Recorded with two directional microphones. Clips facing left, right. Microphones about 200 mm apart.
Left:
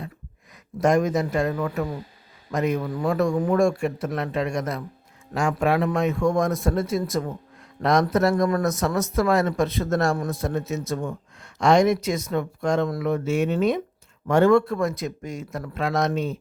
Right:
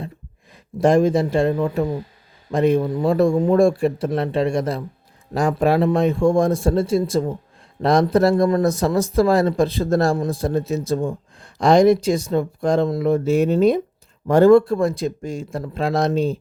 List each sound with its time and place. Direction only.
0.8 s speech: 30° right (ahead or behind)